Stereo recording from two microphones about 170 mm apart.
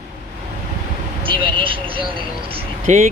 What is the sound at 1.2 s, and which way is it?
Speech, 30° right (ahead or behind).